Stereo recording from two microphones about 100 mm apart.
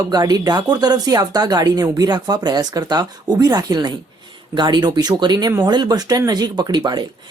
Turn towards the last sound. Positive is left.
turn(degrees=-45)  # may be behind; listen again after turning